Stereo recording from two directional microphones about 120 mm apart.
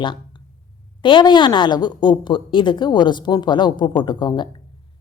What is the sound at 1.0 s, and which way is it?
Speech, 40° left (ahead or behind).